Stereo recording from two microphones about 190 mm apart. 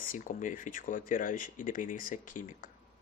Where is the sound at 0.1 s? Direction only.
45° left (ahead or behind).